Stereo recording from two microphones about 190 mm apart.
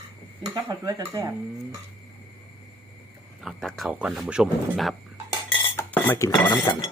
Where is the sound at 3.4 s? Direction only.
Centre (ahead or behind).